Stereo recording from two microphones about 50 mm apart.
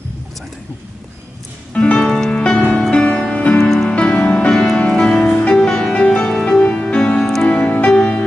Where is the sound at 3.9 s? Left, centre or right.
Left.